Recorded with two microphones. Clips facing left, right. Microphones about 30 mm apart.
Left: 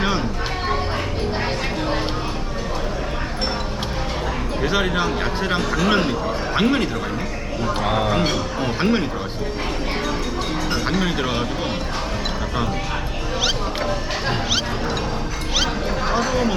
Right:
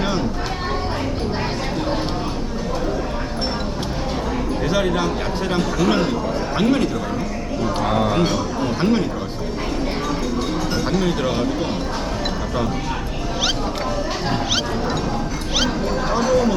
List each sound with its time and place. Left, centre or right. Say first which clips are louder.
4.6 s speech: even; centre
8.2 s speech: right 1 dB; centre
10.7 s speech: even; left
16.0 s speech: right 3 dB; centre